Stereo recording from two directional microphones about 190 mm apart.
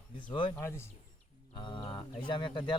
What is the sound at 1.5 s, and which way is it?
Speech, 25° left (ahead or behind).